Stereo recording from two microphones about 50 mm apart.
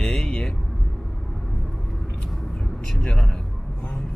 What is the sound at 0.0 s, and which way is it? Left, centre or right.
Vehicle, centre.